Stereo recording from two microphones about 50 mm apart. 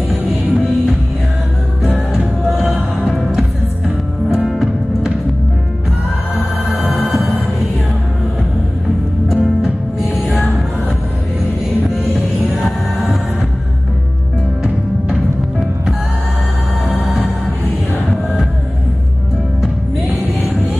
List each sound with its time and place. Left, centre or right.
0.1 s music: centre
6.9 s music: centre
9.3 s music: centre
11.8 s music: centre
20.1 s music: left